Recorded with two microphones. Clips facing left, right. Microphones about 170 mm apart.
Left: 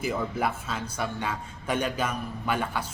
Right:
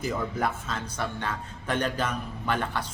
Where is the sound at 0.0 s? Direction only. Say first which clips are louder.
Left 1 dB; 10° left (ahead or behind).